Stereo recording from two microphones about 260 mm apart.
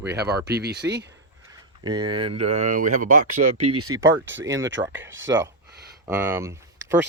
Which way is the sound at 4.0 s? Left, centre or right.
Right.